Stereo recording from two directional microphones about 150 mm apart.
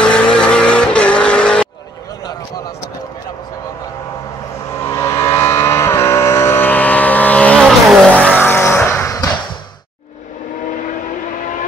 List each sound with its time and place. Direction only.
0.0 s vehicle: 5° left (ahead or behind)
4.7 s vehicle: 15° left (ahead or behind)